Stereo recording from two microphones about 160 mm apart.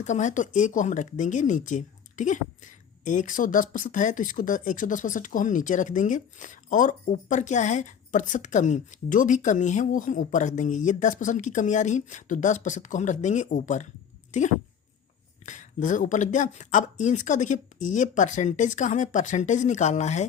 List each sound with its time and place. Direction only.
0.0 s speech: 50° left (ahead or behind)